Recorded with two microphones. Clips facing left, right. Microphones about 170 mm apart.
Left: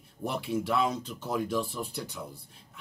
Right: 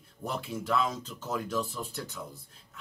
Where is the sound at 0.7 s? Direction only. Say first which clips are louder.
Right 1 dB; 10° left (ahead or behind).